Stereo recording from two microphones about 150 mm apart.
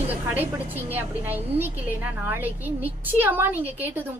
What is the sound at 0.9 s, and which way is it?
A woman's voice, 15° right (ahead or behind).